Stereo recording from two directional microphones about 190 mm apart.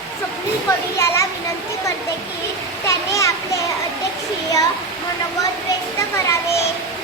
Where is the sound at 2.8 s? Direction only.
15° left (ahead or behind).